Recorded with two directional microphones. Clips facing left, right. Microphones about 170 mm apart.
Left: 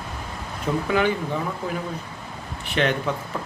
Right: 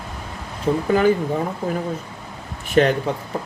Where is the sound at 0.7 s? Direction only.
35° right (ahead or behind).